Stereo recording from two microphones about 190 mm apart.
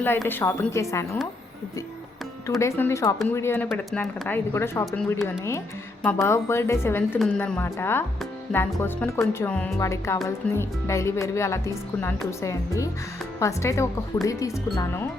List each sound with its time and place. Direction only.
0.0 s speech: 10° left (ahead or behind)
2.6 s speech: 15° left (ahead or behind)